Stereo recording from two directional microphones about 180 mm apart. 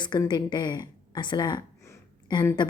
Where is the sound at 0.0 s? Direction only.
25° left (ahead or behind).